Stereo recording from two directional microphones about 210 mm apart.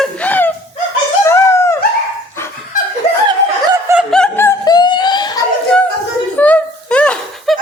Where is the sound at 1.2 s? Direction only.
15° left (ahead or behind).